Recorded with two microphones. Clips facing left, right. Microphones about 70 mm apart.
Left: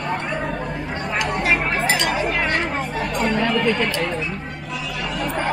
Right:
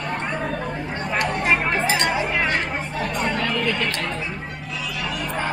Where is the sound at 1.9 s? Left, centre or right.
Centre.